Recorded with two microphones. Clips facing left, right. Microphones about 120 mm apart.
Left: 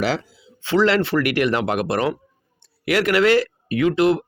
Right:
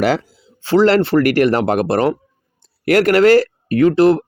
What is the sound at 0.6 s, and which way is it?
Speech, 40° right (ahead or behind).